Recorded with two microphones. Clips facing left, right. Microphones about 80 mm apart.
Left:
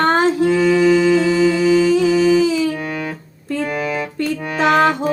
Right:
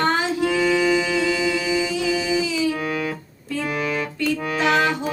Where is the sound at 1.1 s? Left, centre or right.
Left.